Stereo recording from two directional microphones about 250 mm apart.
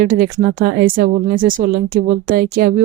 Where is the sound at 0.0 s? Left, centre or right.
Right.